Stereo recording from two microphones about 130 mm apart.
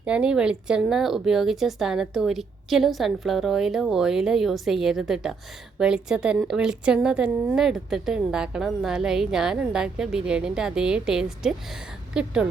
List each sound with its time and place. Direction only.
0.0 s a woman's voice: 10° right (ahead or behind)